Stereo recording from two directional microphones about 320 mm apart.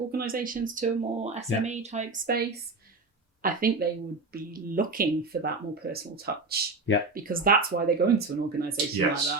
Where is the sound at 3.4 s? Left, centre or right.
Right.